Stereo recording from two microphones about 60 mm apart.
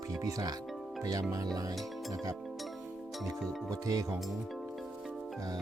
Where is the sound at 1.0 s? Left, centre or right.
Right.